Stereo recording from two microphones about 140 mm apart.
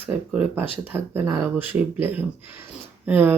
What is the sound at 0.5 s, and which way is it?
Speech, 15° right (ahead or behind).